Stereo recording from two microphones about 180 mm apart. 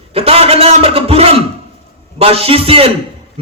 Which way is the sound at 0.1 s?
35° right (ahead or behind).